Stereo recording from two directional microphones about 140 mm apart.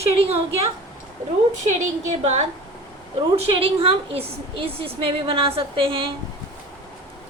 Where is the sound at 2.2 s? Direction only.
55° right (ahead or behind).